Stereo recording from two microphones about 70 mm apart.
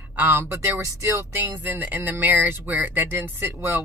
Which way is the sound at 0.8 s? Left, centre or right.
Right.